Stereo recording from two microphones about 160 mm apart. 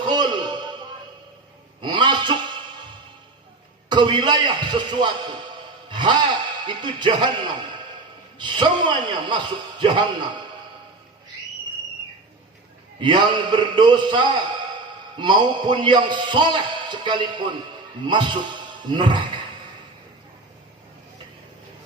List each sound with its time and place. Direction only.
0.1 s music: 25° right (ahead or behind)
1.8 s a sound: 30° right (ahead or behind)
3.8 s a man's voice: 30° right (ahead or behind)
13.0 s a man's voice: 30° right (ahead or behind)